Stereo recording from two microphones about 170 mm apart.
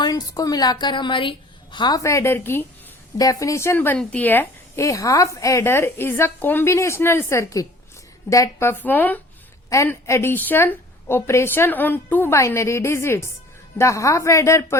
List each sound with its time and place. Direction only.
0.0 s a woman's voice: 20° left (ahead or behind)